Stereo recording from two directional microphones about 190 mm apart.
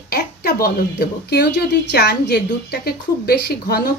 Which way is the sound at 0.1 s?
55° left (ahead or behind).